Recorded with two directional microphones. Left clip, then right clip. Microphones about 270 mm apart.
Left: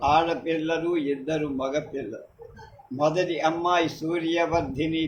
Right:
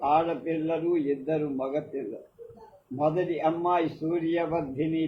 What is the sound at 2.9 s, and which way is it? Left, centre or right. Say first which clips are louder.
A man's voice: left 3 dB; left.